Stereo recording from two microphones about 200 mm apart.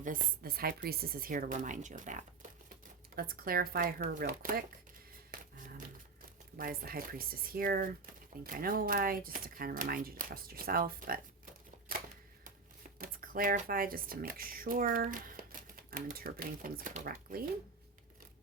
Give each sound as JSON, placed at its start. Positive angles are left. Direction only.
{"t": 0.0, "sound": "speech", "side_deg": -40}
{"t": 5.3, "sound": "a sound", "side_deg": -40}
{"t": 6.6, "sound": "speech", "side_deg": -45}
{"t": 13.0, "sound": "speech", "side_deg": -45}